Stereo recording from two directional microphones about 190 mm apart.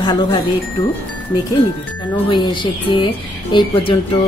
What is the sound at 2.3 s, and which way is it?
Speech, 25° left (ahead or behind).